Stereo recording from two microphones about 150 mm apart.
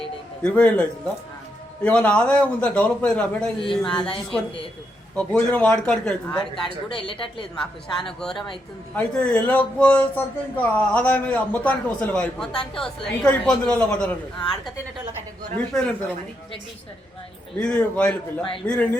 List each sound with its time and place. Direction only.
0.4 s speech: 10° left (ahead or behind)
5.1 s speech: 10° left (ahead or behind)
6.9 s a woman's voice: 35° left (ahead or behind)
8.0 s speech: 5° left (ahead or behind)
17.6 s speech: 5° left (ahead or behind)